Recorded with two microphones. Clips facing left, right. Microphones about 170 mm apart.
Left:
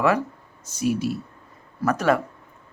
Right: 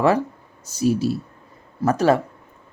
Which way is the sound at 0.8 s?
30° right (ahead or behind).